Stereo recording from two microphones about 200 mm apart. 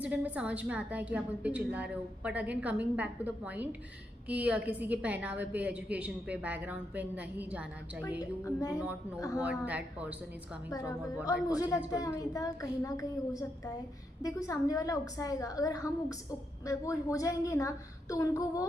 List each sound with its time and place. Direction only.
0.0 s a woman's voice: 5° right (ahead or behind)
8.2 s a woman's voice: 15° left (ahead or behind)
9.4 s a woman's voice: 5° right (ahead or behind)
10.7 s a woman's voice: 15° left (ahead or behind)